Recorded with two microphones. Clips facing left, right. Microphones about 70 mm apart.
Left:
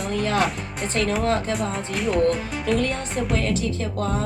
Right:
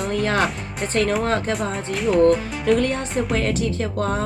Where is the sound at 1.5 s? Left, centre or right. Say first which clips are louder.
Right 1 dB; centre.